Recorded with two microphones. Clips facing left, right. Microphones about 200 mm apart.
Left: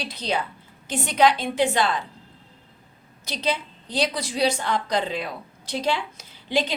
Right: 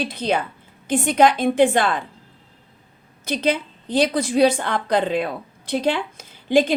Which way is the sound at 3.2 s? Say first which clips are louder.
Right 6 dB; 55° right (ahead or behind).